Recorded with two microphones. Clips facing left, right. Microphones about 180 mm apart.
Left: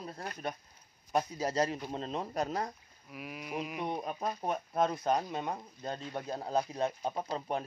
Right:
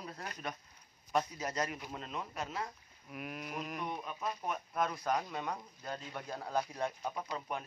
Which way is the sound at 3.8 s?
35° left (ahead or behind).